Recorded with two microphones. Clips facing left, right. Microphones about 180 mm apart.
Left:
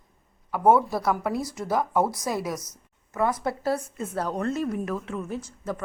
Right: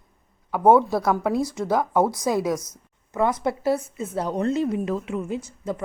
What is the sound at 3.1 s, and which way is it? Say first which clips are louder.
A woman's voice: right 3 dB; 20° right (ahead or behind).